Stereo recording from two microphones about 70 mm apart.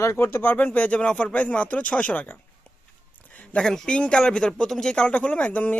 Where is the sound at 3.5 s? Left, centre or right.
Centre.